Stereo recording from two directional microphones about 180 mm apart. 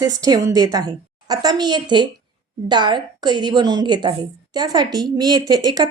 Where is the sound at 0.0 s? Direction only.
20° right (ahead or behind).